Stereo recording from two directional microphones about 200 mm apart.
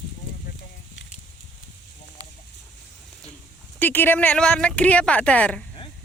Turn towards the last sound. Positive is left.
turn(degrees=5)  # may be behind; listen again after turning